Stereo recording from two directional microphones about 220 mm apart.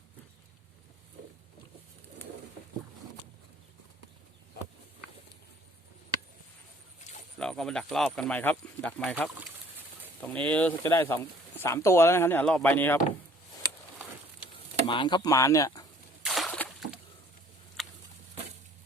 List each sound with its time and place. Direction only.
7.3 s speech: 5° left (ahead or behind)
14.8 s speech: 20° left (ahead or behind)
16.2 s a sound: centre (ahead or behind)